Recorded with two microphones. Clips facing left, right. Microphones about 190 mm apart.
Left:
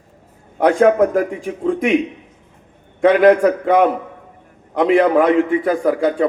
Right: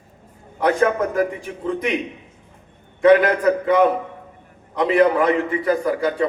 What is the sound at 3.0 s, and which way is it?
A man's voice, 55° left (ahead or behind).